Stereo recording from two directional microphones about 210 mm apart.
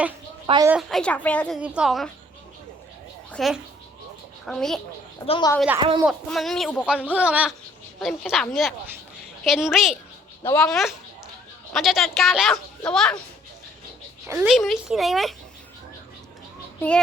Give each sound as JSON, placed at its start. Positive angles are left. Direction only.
{"t": 0.4, "sound": "a woman's voice", "side_deg": -20}
{"t": 0.7, "sound": "speech", "side_deg": 0}
{"t": 1.6, "sound": "speech", "side_deg": -5}
{"t": 3.3, "sound": "speech", "side_deg": 0}
{"t": 5.2, "sound": "a woman's voice", "side_deg": 25}
{"t": 5.5, "sound": "speech", "side_deg": -5}
{"t": 7.1, "sound": "speech", "side_deg": -5}
{"t": 14.3, "sound": "speech", "side_deg": 0}